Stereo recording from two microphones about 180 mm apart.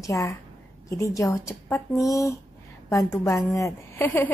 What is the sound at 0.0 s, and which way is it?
A woman's voice, 15° left (ahead or behind).